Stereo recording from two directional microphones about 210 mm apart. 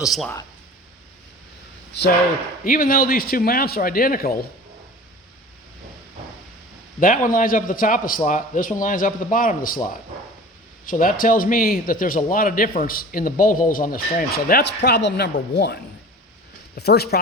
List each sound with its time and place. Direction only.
0.0 s speech: centre (ahead or behind)
1.9 s a man's voice: 50° left (ahead or behind)
7.0 s a man's voice: 40° left (ahead or behind)
10.8 s a man's voice: 40° left (ahead or behind)